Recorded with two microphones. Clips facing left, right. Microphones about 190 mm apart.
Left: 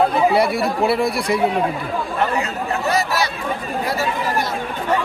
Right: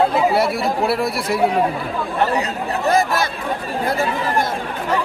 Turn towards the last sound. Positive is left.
turn(degrees=-50)  # may be behind; listen again after turning